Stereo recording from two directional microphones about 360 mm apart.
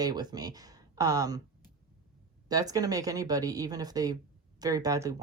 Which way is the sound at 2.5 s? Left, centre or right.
Centre.